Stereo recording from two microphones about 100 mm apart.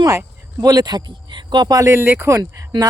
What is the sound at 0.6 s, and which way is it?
Speech, 40° right (ahead or behind).